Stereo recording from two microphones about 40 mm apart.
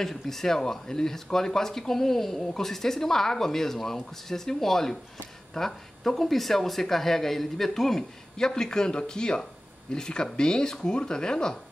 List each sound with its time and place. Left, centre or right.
0.0 s speech: centre